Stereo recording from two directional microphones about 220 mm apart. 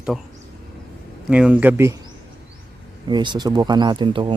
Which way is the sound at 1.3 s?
5° right (ahead or behind).